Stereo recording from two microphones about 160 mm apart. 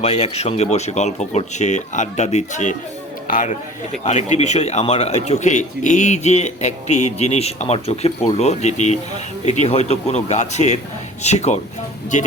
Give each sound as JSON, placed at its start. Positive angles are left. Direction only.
{"t": 0.0, "sound": "speech", "side_deg": 40}